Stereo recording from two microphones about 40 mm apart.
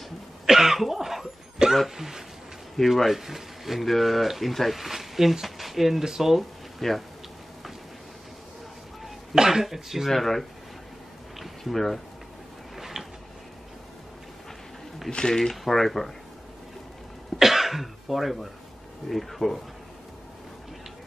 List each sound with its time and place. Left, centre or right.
0.5 s cough: centre
1.6 s a sound: centre
2.8 s speech: centre
6.3 s a sound: centre
9.3 s speech: centre
10.1 s speech: centre
11.3 s a sound: centre
15.0 s speech: centre
15.5 s speech: centre
17.4 s speech: centre